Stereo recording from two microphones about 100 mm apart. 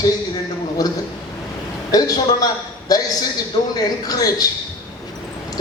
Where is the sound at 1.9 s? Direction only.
40° left (ahead or behind).